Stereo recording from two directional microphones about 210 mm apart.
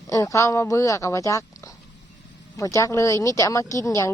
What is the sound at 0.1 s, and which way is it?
Speech, 15° left (ahead or behind).